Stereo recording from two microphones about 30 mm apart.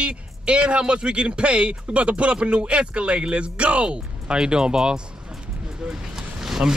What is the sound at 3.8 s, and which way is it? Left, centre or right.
Speech, right.